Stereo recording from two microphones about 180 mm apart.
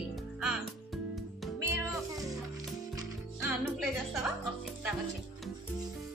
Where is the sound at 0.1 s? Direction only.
Centre (ahead or behind).